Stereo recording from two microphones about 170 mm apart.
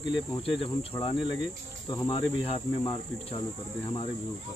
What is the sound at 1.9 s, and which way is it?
Cricket, 20° left (ahead or behind).